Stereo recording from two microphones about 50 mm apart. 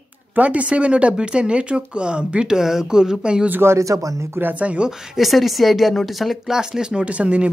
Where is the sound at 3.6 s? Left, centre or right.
Right.